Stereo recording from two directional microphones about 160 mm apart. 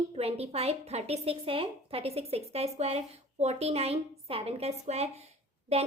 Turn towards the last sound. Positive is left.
turn(degrees=-40)  # may be behind; listen again after turning